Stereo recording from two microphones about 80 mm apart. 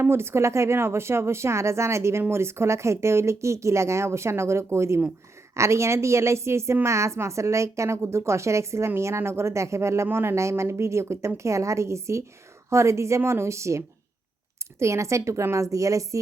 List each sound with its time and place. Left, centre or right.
0.0 s speech: right